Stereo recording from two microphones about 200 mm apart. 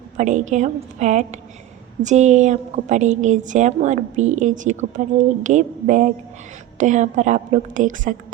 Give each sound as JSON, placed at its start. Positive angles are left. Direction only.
{"t": 0.2, "sound": "a woman's voice", "side_deg": -35}